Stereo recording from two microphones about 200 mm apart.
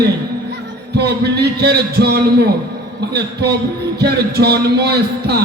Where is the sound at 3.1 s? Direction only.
55° right (ahead or behind).